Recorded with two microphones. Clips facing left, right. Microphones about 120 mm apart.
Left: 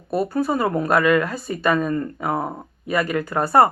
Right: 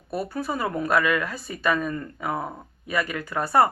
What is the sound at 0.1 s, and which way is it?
Speech, 35° left (ahead or behind).